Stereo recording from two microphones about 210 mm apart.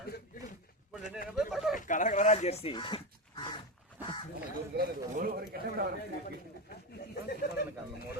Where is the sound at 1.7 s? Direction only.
40° left (ahead or behind); by 3.6 s 20° left (ahead or behind).